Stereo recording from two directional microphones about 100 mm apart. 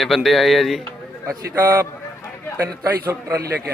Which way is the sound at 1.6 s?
30° right (ahead or behind).